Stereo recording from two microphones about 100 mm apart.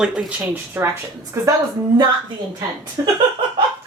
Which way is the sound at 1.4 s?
30° right (ahead or behind).